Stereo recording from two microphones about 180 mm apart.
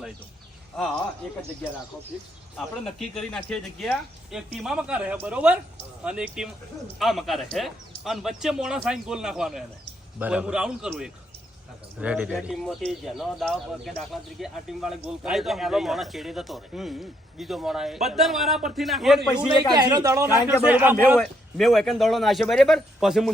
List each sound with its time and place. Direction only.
2.6 s speech: centre (ahead or behind)
19.7 s speech: 20° right (ahead or behind)
20.2 s a man's voice: 20° left (ahead or behind)
20.7 s a man's voice: 10° right (ahead or behind)